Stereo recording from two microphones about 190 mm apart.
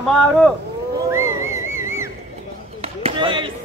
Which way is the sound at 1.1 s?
15° right (ahead or behind).